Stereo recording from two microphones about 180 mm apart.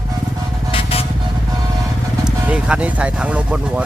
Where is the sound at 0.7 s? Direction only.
30° left (ahead or behind).